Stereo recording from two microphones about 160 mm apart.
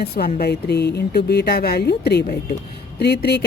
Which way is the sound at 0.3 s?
85° left.